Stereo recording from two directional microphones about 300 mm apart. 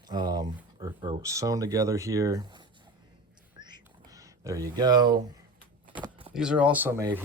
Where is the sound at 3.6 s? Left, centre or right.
Centre.